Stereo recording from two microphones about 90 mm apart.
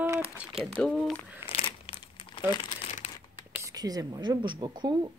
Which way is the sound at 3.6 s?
45° right (ahead or behind).